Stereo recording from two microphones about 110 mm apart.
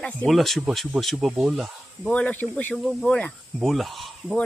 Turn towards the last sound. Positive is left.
turn(degrees=0)  # may be behind; listen again after turning